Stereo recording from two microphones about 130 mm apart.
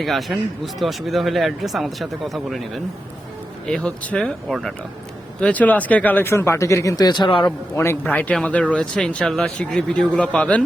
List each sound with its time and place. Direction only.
0.0 s speech: centre (ahead or behind); by 7.5 s 40° left (ahead or behind)
7.8 s speech: 15° left (ahead or behind)